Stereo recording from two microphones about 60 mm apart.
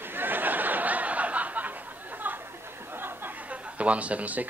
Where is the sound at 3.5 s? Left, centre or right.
Right.